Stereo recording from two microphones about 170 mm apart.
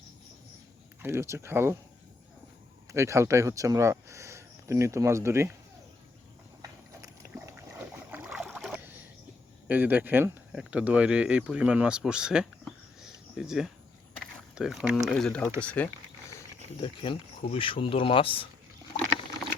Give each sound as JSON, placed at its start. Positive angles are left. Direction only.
{"t": 1.0, "sound": "speech", "side_deg": -15}
{"t": 2.9, "sound": "speech", "side_deg": -15}
{"t": 6.6, "sound": "a sound", "side_deg": -20}
{"t": 7.8, "sound": "boat", "side_deg": -10}
{"t": 9.6, "sound": "speech", "side_deg": -10}
{"t": 16.8, "sound": "speech", "side_deg": 30}